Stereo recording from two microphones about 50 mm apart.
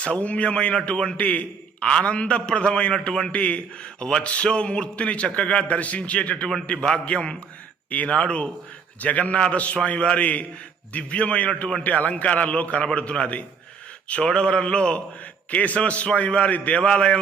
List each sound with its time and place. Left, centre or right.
0.0 s a man's voice: left
1.1 s a man's voice: left
3.1 s a man's voice: centre
3.3 s a man's voice: left
15.4 s a man's voice: left